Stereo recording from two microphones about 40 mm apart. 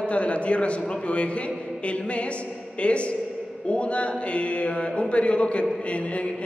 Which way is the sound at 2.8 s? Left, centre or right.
Left.